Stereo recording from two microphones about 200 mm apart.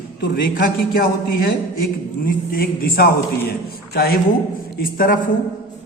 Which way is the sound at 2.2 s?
45° left (ahead or behind).